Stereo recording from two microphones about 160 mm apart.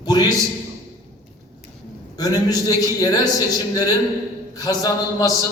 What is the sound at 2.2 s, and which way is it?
A man's voice, 25° left (ahead or behind).